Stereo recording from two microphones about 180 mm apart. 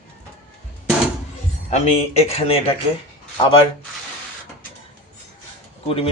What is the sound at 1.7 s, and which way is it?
Speech, 35° left (ahead or behind).